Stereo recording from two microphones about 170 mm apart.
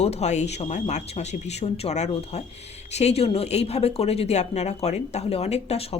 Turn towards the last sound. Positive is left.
turn(degrees=35)  # may be behind; listen again after turning